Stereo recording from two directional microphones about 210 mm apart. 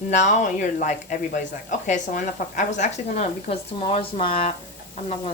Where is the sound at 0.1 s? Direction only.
35° left (ahead or behind).